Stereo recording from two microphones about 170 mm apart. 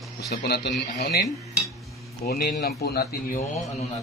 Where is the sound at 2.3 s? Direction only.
70° left (ahead or behind).